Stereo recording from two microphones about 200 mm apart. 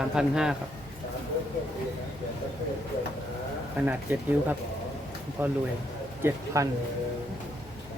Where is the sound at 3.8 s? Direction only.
10° right (ahead or behind).